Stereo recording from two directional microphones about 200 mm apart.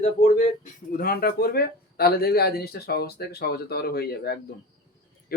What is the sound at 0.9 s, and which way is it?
Speech, 50° left (ahead or behind).